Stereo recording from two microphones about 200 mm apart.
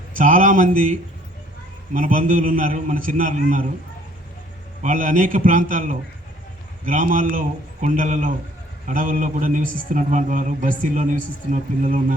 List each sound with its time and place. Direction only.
0.2 s a man's voice: 40° right (ahead or behind)
4.8 s a man's voice: 40° right (ahead or behind)